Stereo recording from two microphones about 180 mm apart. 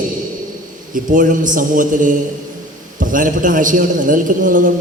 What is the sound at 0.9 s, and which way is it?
A man's voice, 50° right (ahead or behind).